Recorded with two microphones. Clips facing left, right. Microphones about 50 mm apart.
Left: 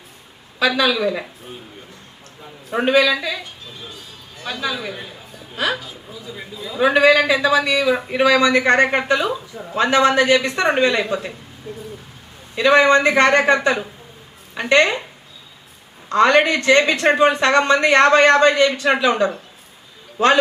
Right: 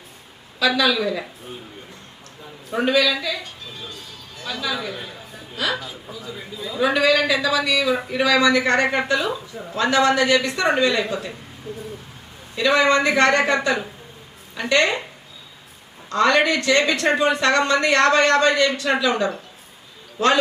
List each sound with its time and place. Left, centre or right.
0.6 s a woman's voice: left
2.4 s a sound: left
2.8 s speech: left
4.7 s speech: centre
5.6 s speech: left
9.3 s speech: centre
9.7 s a woman's voice: left
12.5 s speech: left
14.5 s speech: left
16.0 s a man's voice: left